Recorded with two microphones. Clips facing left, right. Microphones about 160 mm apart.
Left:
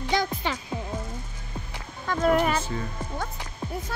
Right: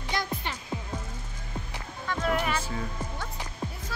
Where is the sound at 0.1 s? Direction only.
90° left.